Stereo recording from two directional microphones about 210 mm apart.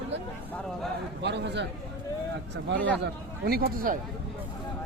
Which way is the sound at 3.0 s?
45° right (ahead or behind).